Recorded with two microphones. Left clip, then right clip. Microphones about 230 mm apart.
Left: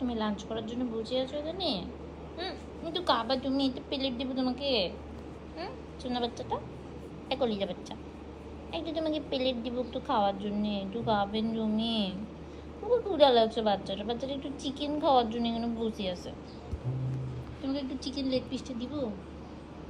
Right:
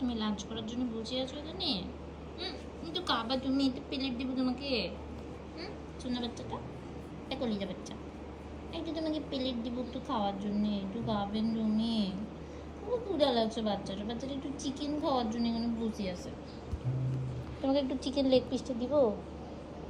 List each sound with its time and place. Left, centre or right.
0.1 s a woman's voice: left
2.9 s a woman's voice: left
6.1 s a woman's voice: centre
17.6 s a woman's voice: centre